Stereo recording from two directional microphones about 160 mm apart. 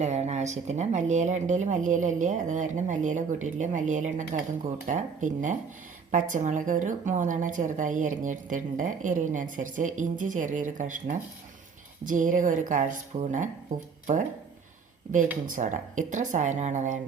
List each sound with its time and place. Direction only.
0.0 s speech: 45° right (ahead or behind)
15.4 s speech: 55° right (ahead or behind)